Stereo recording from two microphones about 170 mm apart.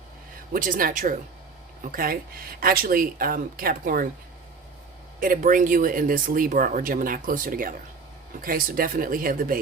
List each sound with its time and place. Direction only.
0.5 s speech: 55° right (ahead or behind)
5.2 s speech: 50° right (ahead or behind)